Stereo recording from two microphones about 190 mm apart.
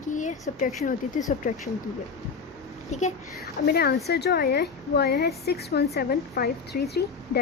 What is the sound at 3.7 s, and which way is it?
A woman's voice, 55° left (ahead or behind).